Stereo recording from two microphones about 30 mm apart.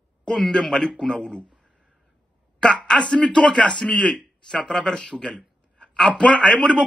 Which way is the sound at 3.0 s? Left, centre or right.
Left.